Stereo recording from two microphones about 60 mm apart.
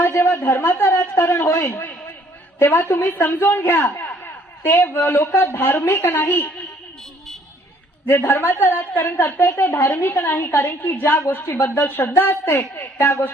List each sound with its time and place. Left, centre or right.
0.0 s a sound: left
0.3 s a man's voice: left
8.0 s a woman's voice: left
10.9 s a woman's voice: left